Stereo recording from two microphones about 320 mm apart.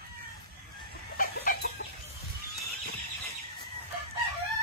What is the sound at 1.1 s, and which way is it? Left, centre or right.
Chicken, left.